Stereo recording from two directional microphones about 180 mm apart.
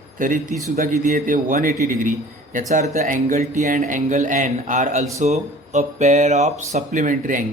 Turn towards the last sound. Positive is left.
turn(degrees=-45)  # may be behind; listen again after turning